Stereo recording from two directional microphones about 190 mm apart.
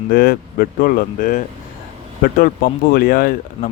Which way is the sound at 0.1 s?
50° left (ahead or behind).